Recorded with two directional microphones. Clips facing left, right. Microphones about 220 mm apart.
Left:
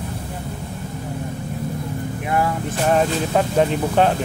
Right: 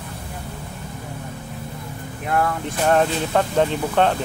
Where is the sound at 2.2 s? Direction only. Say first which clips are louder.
Even; 5° left (ahead or behind).